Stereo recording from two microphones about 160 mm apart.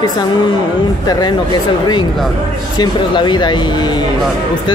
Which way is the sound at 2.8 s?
30° left (ahead or behind).